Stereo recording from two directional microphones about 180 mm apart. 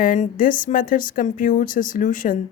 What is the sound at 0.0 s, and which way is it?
Speech, 50° left (ahead or behind).